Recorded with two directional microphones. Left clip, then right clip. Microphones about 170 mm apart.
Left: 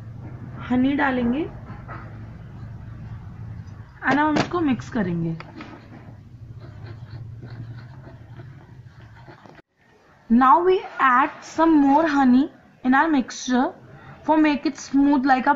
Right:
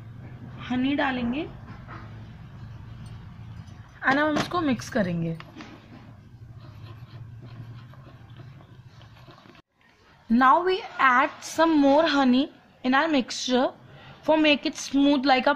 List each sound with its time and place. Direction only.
0.6 s a woman's voice: 45° right (ahead or behind)
4.0 s speech: 40° right (ahead or behind)
10.3 s a woman's voice: 45° right (ahead or behind)